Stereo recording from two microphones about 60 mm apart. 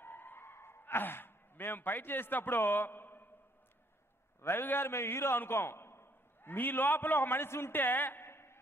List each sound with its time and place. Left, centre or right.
0.0 s sigh: left
4.4 s a man's voice: left